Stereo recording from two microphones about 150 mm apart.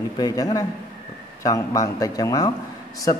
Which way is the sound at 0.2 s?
25° left (ahead or behind).